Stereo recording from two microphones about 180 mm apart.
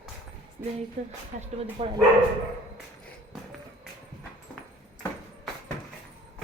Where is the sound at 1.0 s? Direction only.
40° right (ahead or behind).